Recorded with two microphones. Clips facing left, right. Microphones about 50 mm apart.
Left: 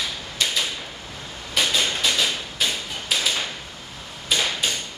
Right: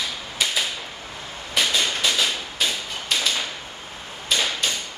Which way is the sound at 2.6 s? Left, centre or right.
Centre.